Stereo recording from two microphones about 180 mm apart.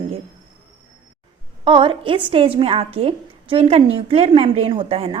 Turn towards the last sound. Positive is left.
turn(degrees=-30)  # may be behind; listen again after turning